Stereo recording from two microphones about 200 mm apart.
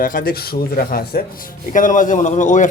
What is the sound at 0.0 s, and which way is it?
A man's voice, 45° left (ahead or behind).